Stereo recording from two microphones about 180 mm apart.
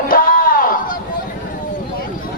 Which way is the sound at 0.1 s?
50° left (ahead or behind).